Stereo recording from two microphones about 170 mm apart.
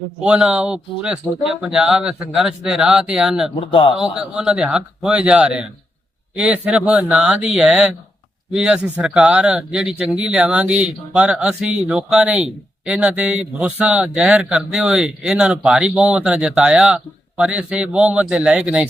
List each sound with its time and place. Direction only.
0.2 s speech: 5° right (ahead or behind)
3.7 s a man's voice: 30° left (ahead or behind)
3.9 s speech: 5° right (ahead or behind)